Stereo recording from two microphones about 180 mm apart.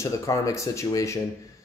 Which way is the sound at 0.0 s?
15° left (ahead or behind).